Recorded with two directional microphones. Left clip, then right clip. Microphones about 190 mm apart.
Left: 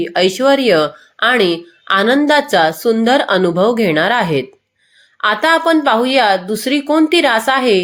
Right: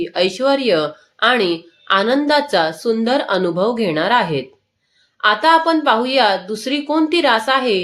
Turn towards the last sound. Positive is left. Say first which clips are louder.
# left 3 dB
turn(degrees=30)  # may be behind; listen again after turning